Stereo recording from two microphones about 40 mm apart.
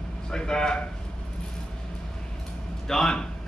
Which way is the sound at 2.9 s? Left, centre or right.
Centre.